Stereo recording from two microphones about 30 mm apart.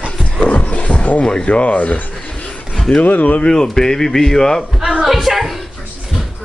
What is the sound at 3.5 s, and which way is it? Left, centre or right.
Speech, centre.